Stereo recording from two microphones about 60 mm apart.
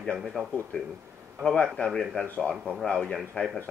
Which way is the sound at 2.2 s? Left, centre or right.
Left.